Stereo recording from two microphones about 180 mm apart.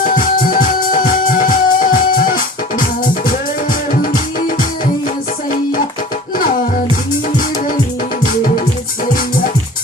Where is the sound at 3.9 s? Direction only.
50° left (ahead or behind).